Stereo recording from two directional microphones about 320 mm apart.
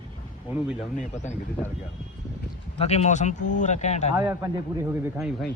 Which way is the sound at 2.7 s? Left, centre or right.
Centre.